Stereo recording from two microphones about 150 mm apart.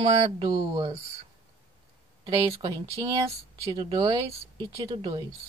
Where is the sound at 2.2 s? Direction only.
25° right (ahead or behind).